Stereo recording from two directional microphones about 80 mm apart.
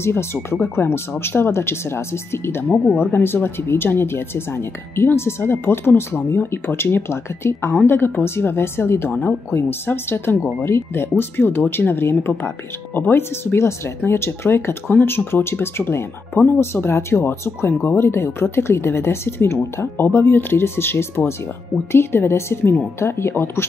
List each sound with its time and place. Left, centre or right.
0.0 s speech: left